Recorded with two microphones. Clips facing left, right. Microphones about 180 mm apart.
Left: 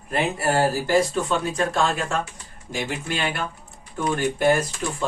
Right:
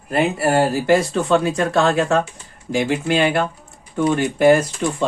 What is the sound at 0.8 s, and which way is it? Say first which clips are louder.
Speech: right 4 dB; 75° right (ahead or behind).